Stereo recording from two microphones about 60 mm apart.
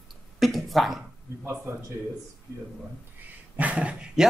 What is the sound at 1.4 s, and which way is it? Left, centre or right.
Speech, right.